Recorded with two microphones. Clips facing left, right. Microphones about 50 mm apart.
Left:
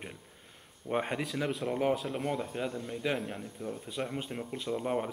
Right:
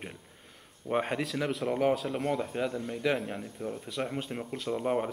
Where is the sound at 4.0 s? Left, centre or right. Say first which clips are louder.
Right 2 dB; centre.